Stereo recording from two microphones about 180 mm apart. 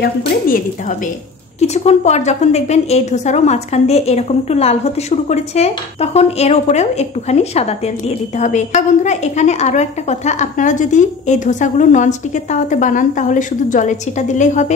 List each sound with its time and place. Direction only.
0.0 s a woman's voice: 55° left (ahead or behind)
1.6 s a woman's voice: 40° left (ahead or behind)